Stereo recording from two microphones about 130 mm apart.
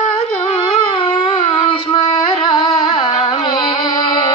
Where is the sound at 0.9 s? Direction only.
40° left (ahead or behind).